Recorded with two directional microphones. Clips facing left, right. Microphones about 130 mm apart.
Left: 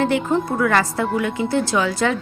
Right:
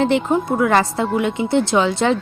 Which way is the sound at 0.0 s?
20° right (ahead or behind).